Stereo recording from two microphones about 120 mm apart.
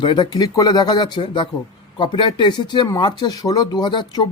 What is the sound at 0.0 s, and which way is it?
A man's voice, 40° left (ahead or behind).